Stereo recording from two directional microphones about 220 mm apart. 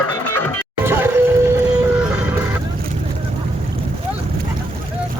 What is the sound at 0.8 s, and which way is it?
Music, 10° right (ahead or behind).